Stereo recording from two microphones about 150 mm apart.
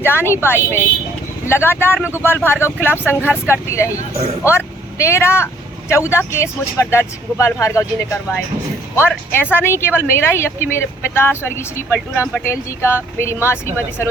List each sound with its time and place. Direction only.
0.0 s speech: 15° left (ahead or behind)
9.3 s speech: 15° left (ahead or behind)